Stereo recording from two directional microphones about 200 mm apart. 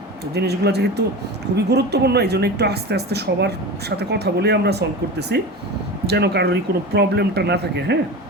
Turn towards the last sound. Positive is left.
turn(degrees=-55)  # may be behind; listen again after turning